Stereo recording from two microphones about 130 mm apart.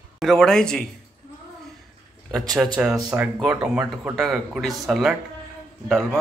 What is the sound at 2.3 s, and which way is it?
Speech, 30° right (ahead or behind).